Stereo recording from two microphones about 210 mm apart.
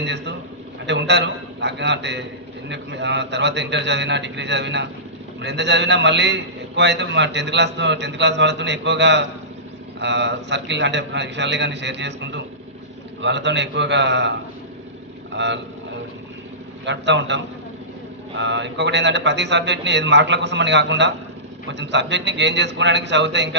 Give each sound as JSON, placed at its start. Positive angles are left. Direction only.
{"t": 0.0, "sound": "a man's voice", "side_deg": -55}
{"t": 15.3, "sound": "speech", "side_deg": -55}
{"t": 16.8, "sound": "a man's voice", "side_deg": -55}
{"t": 18.4, "sound": "a man's voice", "side_deg": -55}